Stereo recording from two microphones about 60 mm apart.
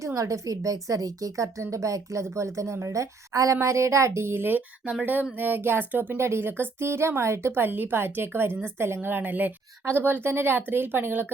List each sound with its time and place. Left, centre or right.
0.0 s a woman's voice: right